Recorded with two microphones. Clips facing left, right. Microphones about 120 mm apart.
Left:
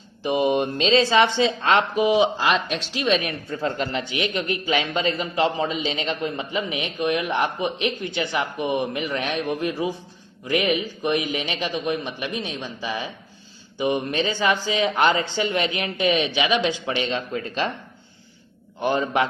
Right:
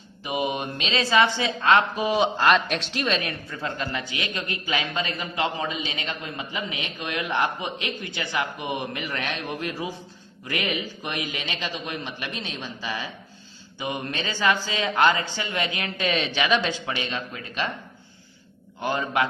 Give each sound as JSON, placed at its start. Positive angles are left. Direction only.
{"t": 0.2, "sound": "a man's voice", "side_deg": 35}
{"t": 2.0, "sound": "speech", "side_deg": 15}
{"t": 2.4, "sound": "speech", "side_deg": 0}
{"t": 3.5, "sound": "a man's voice", "side_deg": 30}
{"t": 16.8, "sound": "a man's voice", "side_deg": 25}
{"t": 18.8, "sound": "a man's voice", "side_deg": 25}